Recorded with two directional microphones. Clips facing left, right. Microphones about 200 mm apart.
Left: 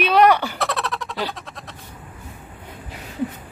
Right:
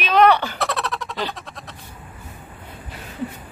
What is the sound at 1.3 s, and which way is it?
Goat, centre (ahead or behind).